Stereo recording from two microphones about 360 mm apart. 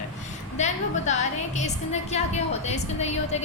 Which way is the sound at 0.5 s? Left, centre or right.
Centre.